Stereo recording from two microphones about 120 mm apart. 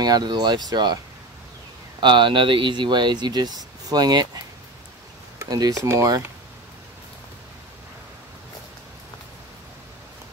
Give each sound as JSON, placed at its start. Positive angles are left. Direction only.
{"t": 0.0, "sound": "speech", "side_deg": -35}
{"t": 2.0, "sound": "speech", "side_deg": -40}
{"t": 5.4, "sound": "speech", "side_deg": -30}